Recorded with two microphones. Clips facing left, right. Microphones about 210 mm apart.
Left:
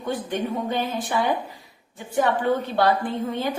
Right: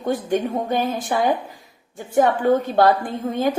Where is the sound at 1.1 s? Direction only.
45° right (ahead or behind).